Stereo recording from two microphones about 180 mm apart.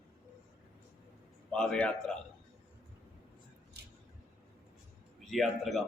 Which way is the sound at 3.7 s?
70° right (ahead or behind).